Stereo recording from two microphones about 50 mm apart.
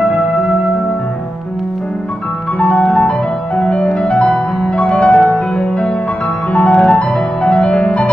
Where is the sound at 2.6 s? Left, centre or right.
Left.